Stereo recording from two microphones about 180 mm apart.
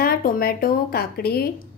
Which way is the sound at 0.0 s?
55° left (ahead or behind).